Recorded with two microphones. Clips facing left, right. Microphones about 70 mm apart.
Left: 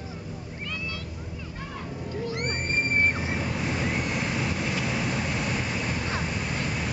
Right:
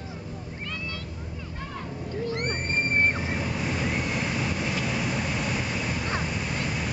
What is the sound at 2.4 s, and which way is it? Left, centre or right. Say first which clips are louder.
Waves: even; centre.